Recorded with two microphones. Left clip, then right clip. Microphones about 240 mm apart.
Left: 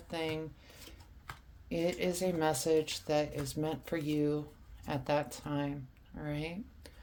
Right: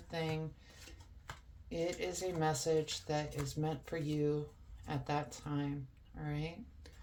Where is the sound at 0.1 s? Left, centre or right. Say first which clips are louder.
Left 3 dB; left.